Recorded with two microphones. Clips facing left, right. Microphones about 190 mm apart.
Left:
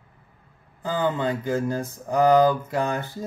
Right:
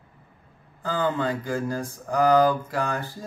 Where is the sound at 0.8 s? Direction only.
15° left (ahead or behind).